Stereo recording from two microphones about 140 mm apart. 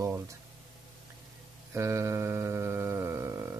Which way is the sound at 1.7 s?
20° right (ahead or behind).